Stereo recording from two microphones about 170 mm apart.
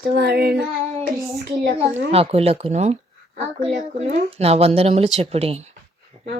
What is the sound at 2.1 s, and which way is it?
A woman's voice, 35° right (ahead or behind).